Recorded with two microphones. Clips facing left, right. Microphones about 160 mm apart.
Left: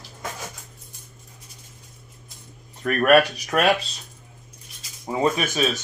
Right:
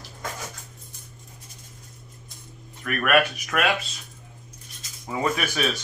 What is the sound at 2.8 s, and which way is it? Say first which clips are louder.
Speech: left 5 dB; 35° left (ahead or behind).